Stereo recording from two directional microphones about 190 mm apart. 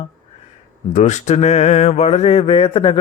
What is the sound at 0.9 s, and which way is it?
Speech, 40° left (ahead or behind).